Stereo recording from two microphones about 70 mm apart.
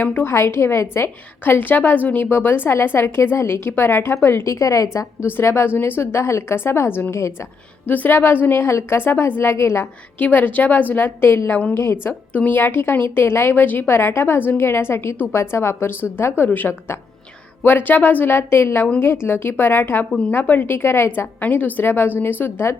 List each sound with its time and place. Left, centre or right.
0.0 s a woman's voice: left
0.3 s a woman's voice: left
5.2 s a woman's voice: left
7.9 s a woman's voice: left
10.2 s a woman's voice: left
12.3 s a woman's voice: left
12.5 s a woman's voice: left
21.4 s a woman's voice: left